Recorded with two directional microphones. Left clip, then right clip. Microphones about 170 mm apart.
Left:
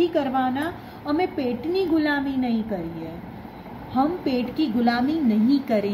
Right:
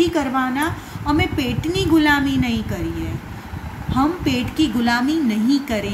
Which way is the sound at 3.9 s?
45° left (ahead or behind).